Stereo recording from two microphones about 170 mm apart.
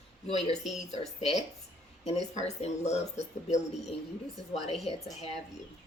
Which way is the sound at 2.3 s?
40° left (ahead or behind).